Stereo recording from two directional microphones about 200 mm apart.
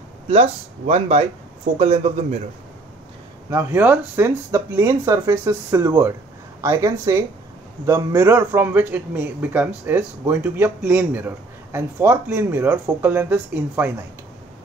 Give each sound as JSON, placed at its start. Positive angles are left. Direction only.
{"t": 0.3, "sound": "speech", "side_deg": -35}
{"t": 3.4, "sound": "a man's voice", "side_deg": -10}